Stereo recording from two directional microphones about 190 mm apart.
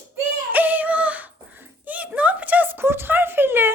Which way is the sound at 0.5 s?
10° right (ahead or behind).